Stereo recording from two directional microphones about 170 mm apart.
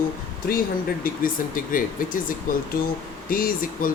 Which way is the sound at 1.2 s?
55° left (ahead or behind).